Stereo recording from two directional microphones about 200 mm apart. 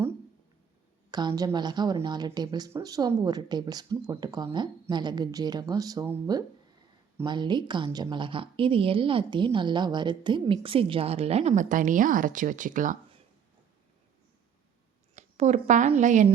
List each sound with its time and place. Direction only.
1.1 s a woman's voice: 20° right (ahead or behind); by 13.0 s 40° right (ahead or behind)
15.1 s a woman's voice: 35° right (ahead or behind)